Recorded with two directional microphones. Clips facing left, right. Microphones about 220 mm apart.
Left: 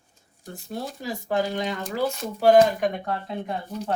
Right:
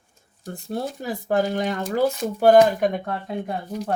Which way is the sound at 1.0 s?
50° right (ahead or behind).